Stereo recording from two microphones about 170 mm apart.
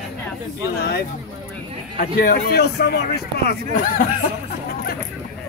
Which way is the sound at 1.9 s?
60° left (ahead or behind).